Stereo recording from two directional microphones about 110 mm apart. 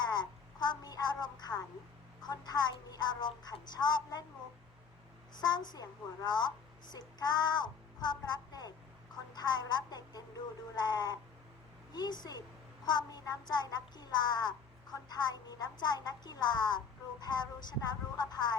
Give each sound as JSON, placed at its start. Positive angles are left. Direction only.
{"t": 0.1, "sound": "a sound", "side_deg": 40}
{"t": 2.2, "sound": "speech", "side_deg": 40}
{"t": 5.4, "sound": "speech", "side_deg": 40}